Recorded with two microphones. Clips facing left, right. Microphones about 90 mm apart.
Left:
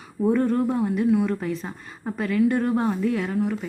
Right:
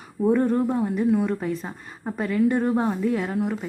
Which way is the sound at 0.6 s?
10° right (ahead or behind).